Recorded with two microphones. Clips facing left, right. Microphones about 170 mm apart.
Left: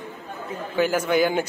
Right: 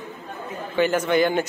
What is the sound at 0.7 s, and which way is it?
Speech, 5° left (ahead or behind).